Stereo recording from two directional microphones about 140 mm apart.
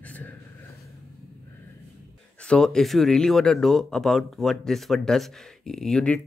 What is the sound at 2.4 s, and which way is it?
Speech, 5° left (ahead or behind).